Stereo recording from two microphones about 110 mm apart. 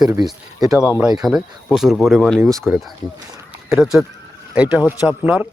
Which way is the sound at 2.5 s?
20° right (ahead or behind).